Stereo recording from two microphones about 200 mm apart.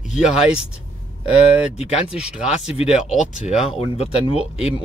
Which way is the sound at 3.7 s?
30° left (ahead or behind).